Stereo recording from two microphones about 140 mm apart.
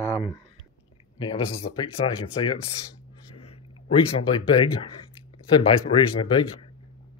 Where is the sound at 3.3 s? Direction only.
45° left (ahead or behind).